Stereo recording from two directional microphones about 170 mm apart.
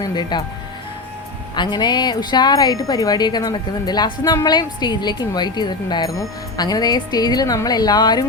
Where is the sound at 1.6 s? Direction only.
25° left (ahead or behind).